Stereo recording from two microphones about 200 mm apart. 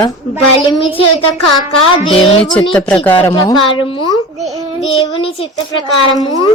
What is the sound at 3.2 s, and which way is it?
Speech, 15° left (ahead or behind).